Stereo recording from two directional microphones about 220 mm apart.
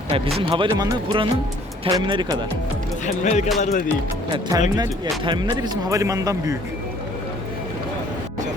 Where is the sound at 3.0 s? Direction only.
35° left (ahead or behind).